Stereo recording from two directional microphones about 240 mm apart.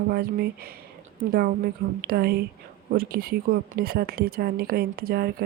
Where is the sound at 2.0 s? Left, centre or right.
Right.